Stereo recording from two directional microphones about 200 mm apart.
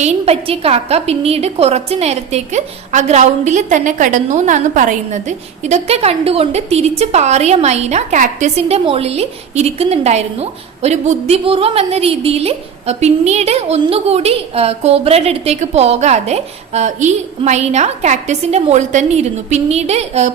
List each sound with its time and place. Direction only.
0.0 s a woman's voice: 30° right (ahead or behind)